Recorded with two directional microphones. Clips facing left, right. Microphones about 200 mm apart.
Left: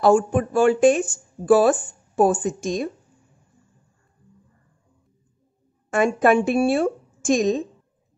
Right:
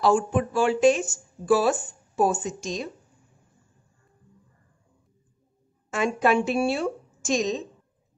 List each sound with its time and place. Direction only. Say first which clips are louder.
0.0 s speech: left 4 dB; 45° left (ahead or behind)
5.9 s a woman's voice: left 5 dB; 50° left (ahead or behind)